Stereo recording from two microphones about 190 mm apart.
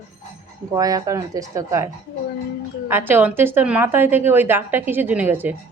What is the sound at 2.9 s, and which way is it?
A woman's voice, 10° right (ahead or behind).